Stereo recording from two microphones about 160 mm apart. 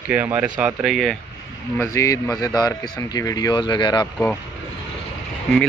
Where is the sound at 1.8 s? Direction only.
20° left (ahead or behind).